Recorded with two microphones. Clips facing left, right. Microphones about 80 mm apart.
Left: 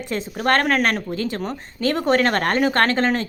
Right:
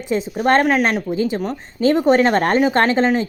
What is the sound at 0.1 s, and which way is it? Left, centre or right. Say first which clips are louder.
A woman's voice: right 4 dB; centre.